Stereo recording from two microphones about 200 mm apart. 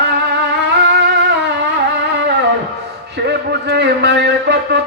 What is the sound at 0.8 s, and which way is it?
Music, 60° right (ahead or behind).